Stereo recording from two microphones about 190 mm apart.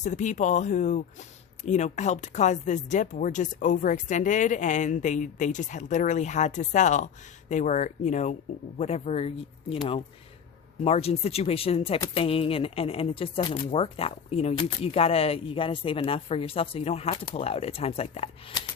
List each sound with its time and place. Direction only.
0.0 s speech: 40° left (ahead or behind)
10.8 s speech: 35° left (ahead or behind)